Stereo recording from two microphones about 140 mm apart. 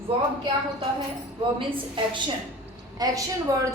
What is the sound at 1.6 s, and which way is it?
Speech, 35° right (ahead or behind).